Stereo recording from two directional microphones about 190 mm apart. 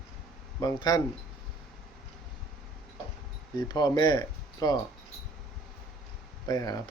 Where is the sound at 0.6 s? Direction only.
20° left (ahead or behind).